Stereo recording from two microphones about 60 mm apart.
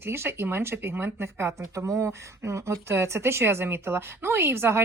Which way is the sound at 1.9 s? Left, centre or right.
Right.